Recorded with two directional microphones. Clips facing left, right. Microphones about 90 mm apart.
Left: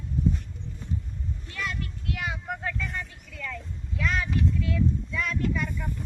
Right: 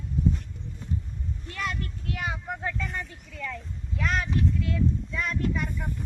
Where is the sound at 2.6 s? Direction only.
25° right (ahead or behind).